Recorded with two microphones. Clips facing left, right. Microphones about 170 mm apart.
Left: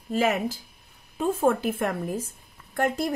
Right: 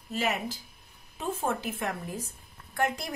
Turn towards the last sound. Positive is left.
turn(degrees=45)  # may be behind; listen again after turning